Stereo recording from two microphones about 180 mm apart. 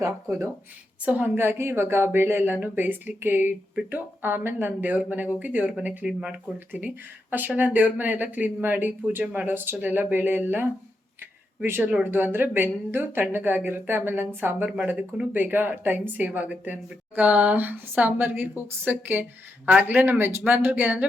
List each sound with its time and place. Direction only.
0.0 s a woman's voice: 15° right (ahead or behind)